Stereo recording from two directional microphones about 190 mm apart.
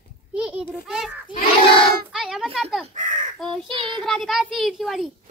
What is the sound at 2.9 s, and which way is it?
Speech, 40° right (ahead or behind).